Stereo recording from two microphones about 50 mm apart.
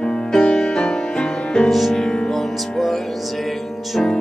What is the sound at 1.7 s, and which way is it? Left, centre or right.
Music, centre.